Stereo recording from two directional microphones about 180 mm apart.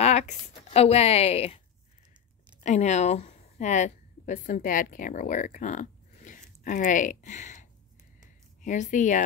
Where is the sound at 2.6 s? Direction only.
40° left (ahead or behind).